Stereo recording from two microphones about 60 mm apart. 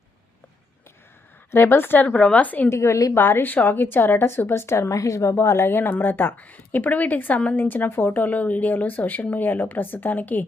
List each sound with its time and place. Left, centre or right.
1.5 s a woman's voice: left
2.0 s speech: left
2.6 s a woman's voice: left
3.2 s a woman's voice: left